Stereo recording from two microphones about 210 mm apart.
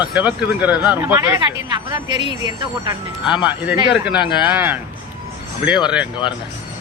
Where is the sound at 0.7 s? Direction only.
20° left (ahead or behind).